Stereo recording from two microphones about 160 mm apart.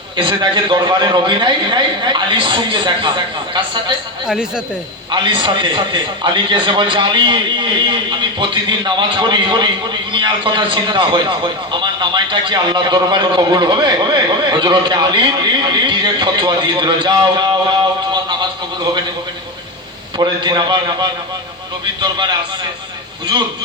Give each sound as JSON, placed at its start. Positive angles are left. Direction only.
{"t": 0.2, "sound": "a man's voice", "side_deg": -30}
{"t": 4.3, "sound": "speech", "side_deg": -5}
{"t": 5.1, "sound": "a man's voice", "side_deg": -30}
{"t": 15.7, "sound": "a sound", "side_deg": -25}
{"t": 20.1, "sound": "a man's voice", "side_deg": -30}